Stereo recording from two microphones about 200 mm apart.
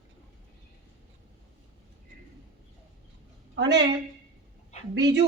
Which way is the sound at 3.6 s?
60° right (ahead or behind).